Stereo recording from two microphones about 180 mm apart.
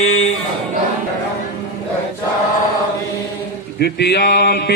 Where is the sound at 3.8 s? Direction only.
65° left (ahead or behind).